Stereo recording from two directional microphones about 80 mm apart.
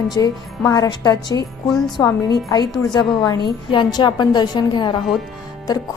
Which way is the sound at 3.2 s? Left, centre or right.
Left.